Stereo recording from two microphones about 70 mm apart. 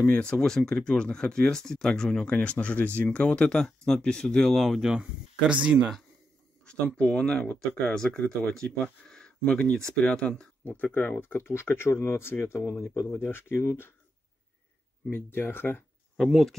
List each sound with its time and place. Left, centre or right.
0.0 s speech: centre
4.6 s speech: centre
5.5 s speech: centre
7.0 s speech: centre; by 13.9 s left
15.0 s speech: left
16.2 s speech: centre